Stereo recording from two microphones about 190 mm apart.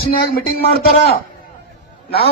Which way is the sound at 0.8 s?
55° left (ahead or behind).